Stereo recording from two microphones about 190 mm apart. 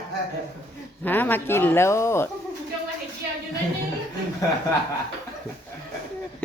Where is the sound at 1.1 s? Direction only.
10° left (ahead or behind).